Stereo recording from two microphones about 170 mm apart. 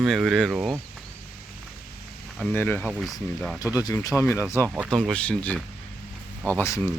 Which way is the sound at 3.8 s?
20° left (ahead or behind).